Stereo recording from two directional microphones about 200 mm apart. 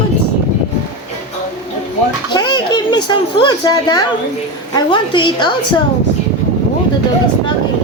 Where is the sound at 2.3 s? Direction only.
20° left (ahead or behind).